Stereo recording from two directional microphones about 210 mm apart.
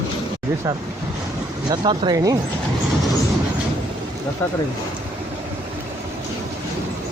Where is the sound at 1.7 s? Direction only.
20° right (ahead or behind).